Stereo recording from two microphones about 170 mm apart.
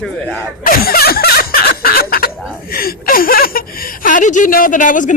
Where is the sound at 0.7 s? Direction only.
60° left (ahead or behind).